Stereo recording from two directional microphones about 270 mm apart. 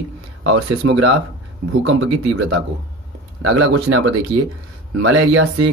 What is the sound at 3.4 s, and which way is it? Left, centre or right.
Speech, right.